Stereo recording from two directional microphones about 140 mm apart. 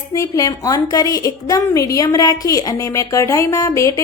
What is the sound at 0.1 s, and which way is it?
A woman's voice, 25° left (ahead or behind).